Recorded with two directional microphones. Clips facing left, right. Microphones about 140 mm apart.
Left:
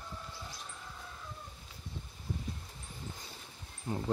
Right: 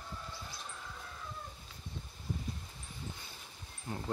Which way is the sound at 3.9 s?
15° left (ahead or behind).